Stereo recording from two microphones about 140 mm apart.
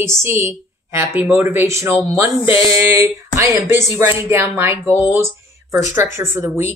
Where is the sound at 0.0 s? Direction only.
20° right (ahead or behind).